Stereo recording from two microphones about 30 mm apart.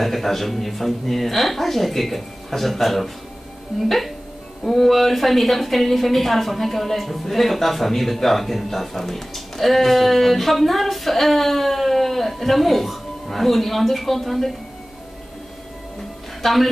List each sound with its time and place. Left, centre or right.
0.0 s a woman's voice: centre
16.4 s a woman's voice: centre